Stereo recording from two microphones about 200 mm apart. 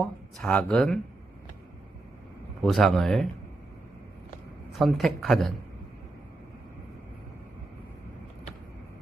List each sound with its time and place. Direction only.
0.0 s speech: 5° left (ahead or behind)
2.6 s speech: centre (ahead or behind)
4.8 s speech: centre (ahead or behind)